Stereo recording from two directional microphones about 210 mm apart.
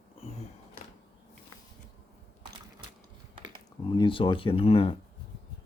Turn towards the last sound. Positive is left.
turn(degrees=25)  # may be behind; listen again after turning